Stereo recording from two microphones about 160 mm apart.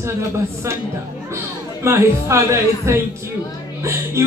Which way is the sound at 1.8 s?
20° right (ahead or behind).